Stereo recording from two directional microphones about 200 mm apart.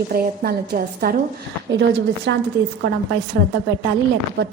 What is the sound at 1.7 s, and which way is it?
Speech, 60° right (ahead or behind).